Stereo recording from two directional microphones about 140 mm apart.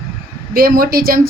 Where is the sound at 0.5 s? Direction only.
90° right.